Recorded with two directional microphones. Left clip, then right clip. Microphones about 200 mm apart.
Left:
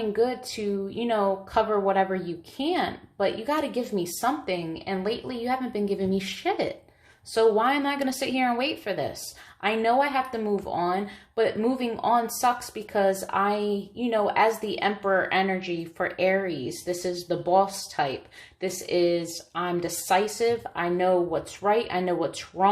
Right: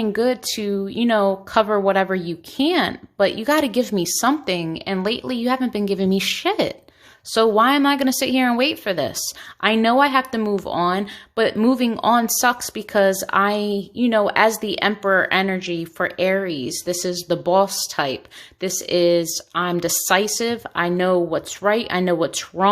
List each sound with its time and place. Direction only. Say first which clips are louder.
0.0 s speech: right 5 dB; 45° right (ahead or behind)